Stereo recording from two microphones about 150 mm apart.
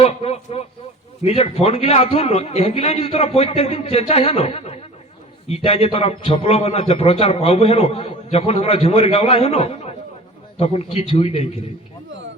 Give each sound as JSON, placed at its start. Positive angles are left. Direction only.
{"t": 0.0, "sound": "a man's voice", "side_deg": 45}